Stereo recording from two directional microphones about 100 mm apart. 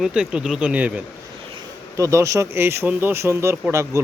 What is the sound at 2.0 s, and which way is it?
Speech, 30° right (ahead or behind).